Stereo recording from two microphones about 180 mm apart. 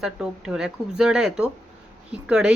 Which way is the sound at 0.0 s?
5° right (ahead or behind).